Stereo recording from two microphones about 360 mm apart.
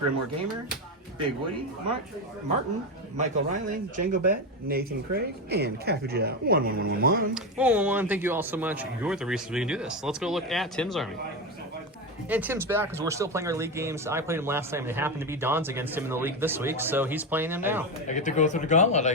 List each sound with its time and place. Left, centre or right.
3.2 s speech: right
7.3 s speech: centre
12.3 s speech: centre
18.1 s speech: centre